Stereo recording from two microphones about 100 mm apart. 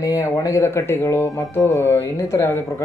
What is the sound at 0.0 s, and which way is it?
A man's voice, 30° left (ahead or behind).